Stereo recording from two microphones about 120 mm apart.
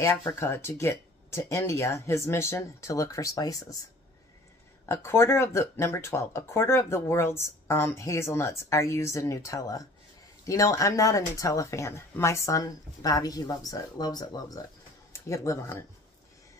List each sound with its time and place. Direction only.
0.0 s speech: 25° left (ahead or behind)
4.8 s speech: 20° left (ahead or behind)